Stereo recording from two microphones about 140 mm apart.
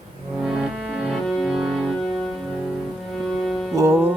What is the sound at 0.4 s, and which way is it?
Cello, 5° right (ahead or behind).